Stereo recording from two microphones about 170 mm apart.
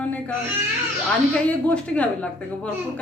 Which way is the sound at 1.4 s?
10° left (ahead or behind).